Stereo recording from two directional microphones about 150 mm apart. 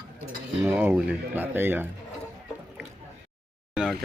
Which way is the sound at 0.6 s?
15° right (ahead or behind).